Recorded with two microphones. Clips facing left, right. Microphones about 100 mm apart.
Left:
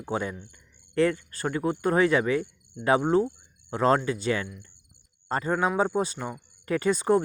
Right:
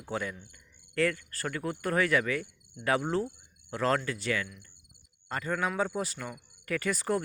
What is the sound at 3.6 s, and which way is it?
Speech, 20° left (ahead or behind).